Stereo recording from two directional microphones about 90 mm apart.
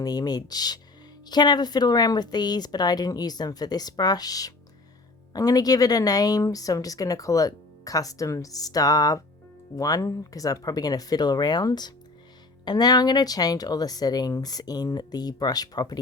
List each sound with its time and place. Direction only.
0.0 s a woman's voice: 45° left (ahead or behind)